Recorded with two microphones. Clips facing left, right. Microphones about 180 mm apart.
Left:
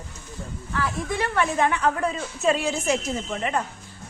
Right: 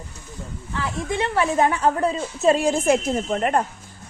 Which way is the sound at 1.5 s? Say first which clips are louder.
Right 3 dB; 35° right (ahead or behind).